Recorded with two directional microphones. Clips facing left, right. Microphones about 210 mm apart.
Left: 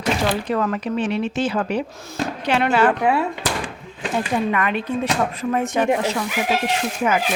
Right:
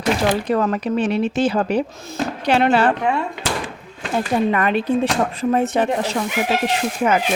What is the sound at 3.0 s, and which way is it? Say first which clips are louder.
Speech: left 2 dB; 10° left (ahead or behind).